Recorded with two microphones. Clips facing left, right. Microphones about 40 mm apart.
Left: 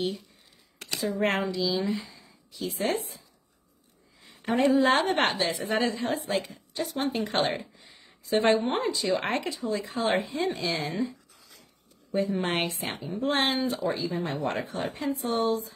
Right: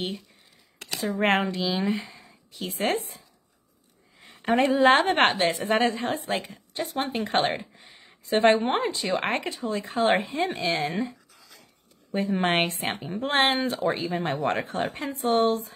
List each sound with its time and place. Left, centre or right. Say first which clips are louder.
0.9 s speech: right 1 dB; centre
1.2 s speech: right 4 dB; right
4.2 s speech: right 2 dB; right
7.5 s a sound: right 1 dB; right
8.3 s speech: right 3 dB; right
10.6 s speech: right 4 dB; right
10.9 s speech: right 1 dB; right